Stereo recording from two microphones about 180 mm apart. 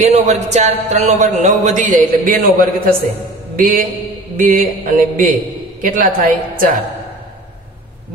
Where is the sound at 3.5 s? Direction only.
50° right (ahead or behind).